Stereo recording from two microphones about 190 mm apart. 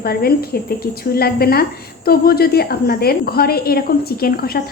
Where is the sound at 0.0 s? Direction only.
55° left (ahead or behind).